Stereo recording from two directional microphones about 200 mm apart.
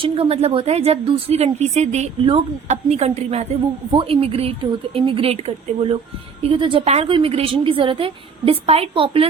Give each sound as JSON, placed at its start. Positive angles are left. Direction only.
{"t": 0.0, "sound": "a woman's voice", "side_deg": -30}
{"t": 6.4, "sound": "a woman's voice", "side_deg": -25}